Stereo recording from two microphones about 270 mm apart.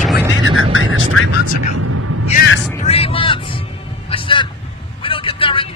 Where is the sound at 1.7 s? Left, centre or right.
Right.